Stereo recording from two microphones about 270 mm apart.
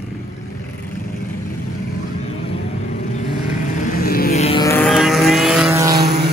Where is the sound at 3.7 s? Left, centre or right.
Left.